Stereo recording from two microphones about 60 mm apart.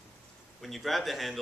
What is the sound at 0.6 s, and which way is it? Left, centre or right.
Speech, centre.